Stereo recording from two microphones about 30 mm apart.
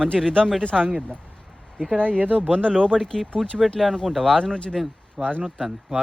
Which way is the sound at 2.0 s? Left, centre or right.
Right.